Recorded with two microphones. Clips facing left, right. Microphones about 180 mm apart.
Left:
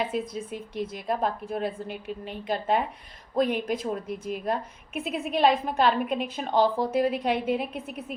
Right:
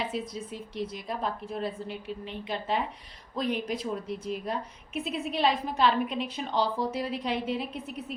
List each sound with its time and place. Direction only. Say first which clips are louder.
0.1 s a woman's voice: left 4 dB; 50° left (ahead or behind)